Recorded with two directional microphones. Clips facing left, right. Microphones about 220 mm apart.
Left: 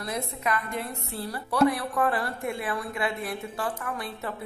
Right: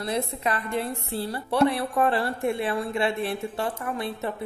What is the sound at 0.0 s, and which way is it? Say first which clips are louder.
A woman's voice: right 4 dB; 30° right (ahead or behind).